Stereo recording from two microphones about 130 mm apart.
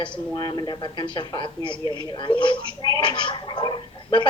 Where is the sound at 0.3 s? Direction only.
35° left (ahead or behind).